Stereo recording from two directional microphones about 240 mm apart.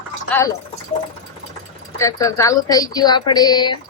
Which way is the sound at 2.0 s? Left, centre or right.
Centre.